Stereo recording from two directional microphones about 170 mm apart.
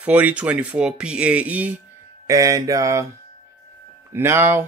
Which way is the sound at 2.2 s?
20° right (ahead or behind).